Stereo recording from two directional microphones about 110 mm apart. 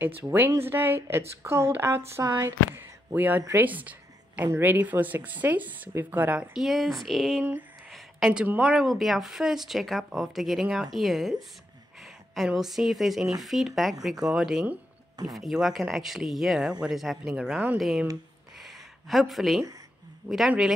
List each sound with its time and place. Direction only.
0.0 s speech: 20° right (ahead or behind)
2.1 s speech: 30° right (ahead or behind); by 6.6 s 15° right (ahead or behind)
6.6 s speech: centre (ahead or behind)
7.9 s a sound: 5° right (ahead or behind)
8.7 s speech: centre (ahead or behind)
18.6 s a sound: centre (ahead or behind)
20.2 s speech: 5° right (ahead or behind)